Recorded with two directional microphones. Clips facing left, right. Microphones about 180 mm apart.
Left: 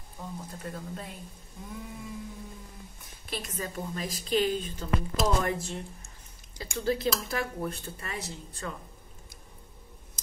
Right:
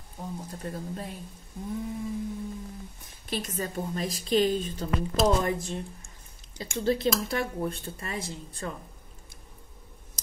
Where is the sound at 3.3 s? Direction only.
35° right (ahead or behind).